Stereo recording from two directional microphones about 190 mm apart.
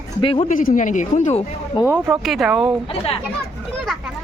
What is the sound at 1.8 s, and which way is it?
Speech, 25° left (ahead or behind).